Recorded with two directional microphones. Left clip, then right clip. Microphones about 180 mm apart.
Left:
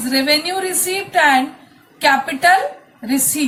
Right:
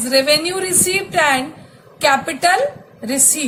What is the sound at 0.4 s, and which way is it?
A woman's voice, 55° right (ahead or behind).